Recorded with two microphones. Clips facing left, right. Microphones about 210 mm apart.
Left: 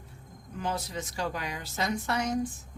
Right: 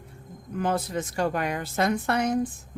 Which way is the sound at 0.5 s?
55° right (ahead or behind).